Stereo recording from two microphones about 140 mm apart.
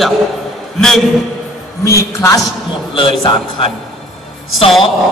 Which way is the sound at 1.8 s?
20° left (ahead or behind).